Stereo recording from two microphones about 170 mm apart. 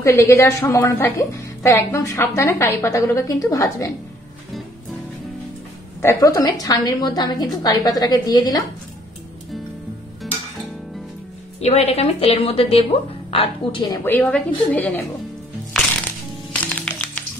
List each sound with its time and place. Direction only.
0.0 s a woman's voice: 15° left (ahead or behind)
5.9 s a woman's voice: 15° left (ahead or behind)
11.6 s a woman's voice: 40° left (ahead or behind)
14.0 s a woman's voice: 10° left (ahead or behind)
16.6 s music: 10° left (ahead or behind)